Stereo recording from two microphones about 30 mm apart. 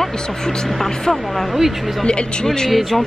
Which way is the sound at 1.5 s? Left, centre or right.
Centre.